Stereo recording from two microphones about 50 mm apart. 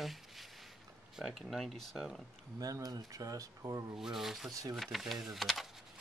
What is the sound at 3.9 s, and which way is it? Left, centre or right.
Speech, centre.